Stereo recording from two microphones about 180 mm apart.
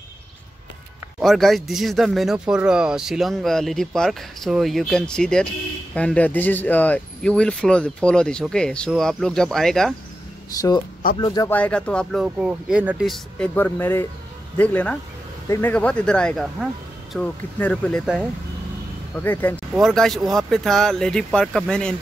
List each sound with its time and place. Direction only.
1.2 s a man's voice: centre (ahead or behind)
11.1 s speech: 25° left (ahead or behind)
11.5 s a man's voice: 5° left (ahead or behind)
13.6 s a man's voice: 10° left (ahead or behind)
19.1 s a man's voice: 10° left (ahead or behind)